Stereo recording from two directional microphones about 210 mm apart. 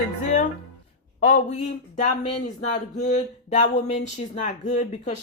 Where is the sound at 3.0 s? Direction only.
35° left (ahead or behind).